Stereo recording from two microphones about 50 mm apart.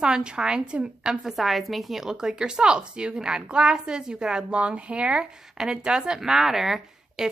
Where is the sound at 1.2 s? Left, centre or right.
Centre.